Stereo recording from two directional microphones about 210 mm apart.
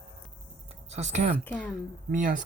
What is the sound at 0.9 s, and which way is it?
Speech, 30° right (ahead or behind).